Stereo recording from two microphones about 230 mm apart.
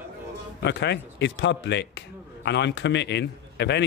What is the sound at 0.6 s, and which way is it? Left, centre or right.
Speech, left.